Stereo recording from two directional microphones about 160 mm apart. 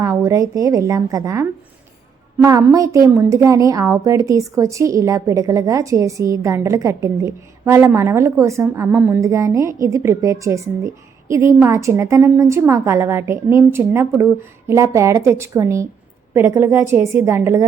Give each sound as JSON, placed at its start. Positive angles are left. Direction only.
{"t": 0.0, "sound": "a woman's voice", "side_deg": -20}